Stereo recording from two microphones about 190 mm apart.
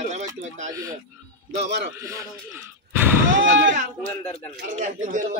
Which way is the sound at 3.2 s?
80° right.